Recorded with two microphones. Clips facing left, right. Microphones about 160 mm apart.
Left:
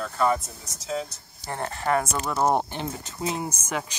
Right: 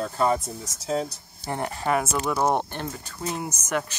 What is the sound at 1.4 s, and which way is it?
Speech, 15° right (ahead or behind).